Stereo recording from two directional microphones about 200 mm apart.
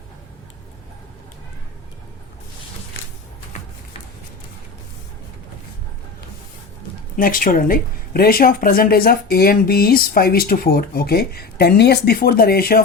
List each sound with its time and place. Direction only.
7.2 s a woman's voice: 45° left (ahead or behind)